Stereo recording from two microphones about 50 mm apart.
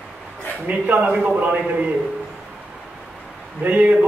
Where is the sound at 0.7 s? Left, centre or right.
Right.